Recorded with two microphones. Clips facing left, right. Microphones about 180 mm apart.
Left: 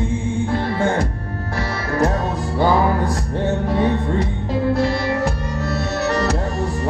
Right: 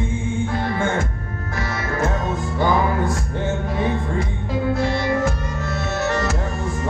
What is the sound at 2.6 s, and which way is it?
Music, 35° left (ahead or behind).